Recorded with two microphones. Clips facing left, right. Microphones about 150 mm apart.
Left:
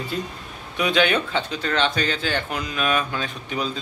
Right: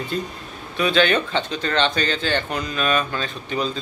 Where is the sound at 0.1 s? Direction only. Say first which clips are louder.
Right 2 dB; 5° left (ahead or behind).